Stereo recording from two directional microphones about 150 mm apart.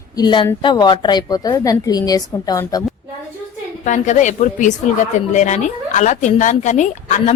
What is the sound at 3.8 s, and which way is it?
A woman's voice, 55° left (ahead or behind).